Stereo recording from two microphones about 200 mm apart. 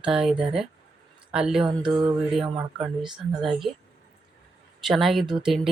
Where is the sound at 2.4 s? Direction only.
5° right (ahead or behind).